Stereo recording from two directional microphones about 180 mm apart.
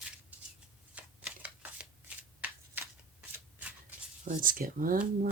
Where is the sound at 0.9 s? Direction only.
5° right (ahead or behind).